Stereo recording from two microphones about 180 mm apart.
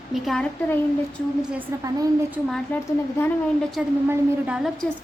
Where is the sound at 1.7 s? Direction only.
15° right (ahead or behind).